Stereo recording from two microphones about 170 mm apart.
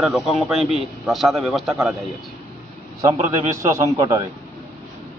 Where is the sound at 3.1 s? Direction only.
40° right (ahead or behind).